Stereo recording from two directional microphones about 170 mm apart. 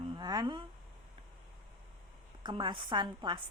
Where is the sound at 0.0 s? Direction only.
25° right (ahead or behind).